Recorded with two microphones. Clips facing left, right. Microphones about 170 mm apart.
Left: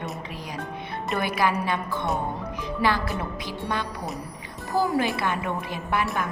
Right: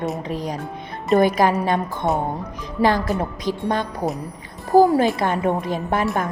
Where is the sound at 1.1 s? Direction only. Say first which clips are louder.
Right 9 dB; 40° right (ahead or behind).